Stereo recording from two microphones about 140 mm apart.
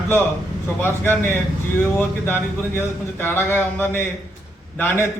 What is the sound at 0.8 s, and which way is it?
A man's voice, 15° left (ahead or behind).